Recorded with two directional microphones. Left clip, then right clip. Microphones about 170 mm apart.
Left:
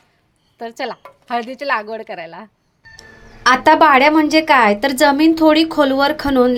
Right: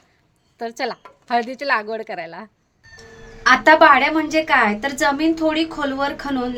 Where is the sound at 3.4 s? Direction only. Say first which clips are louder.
Left 1 dB; 30° left (ahead or behind).